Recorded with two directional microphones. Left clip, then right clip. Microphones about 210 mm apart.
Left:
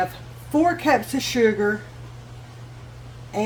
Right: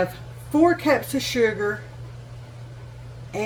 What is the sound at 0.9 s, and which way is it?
Speech, 30° left (ahead or behind).